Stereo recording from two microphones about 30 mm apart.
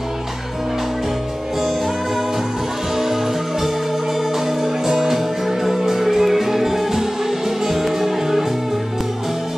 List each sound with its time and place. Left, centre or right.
4.8 s music: centre